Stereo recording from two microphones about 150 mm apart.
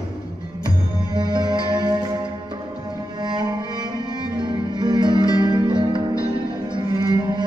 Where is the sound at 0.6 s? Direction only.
30° right (ahead or behind).